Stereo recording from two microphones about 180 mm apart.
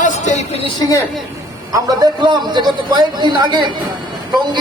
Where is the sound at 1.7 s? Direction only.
20° right (ahead or behind).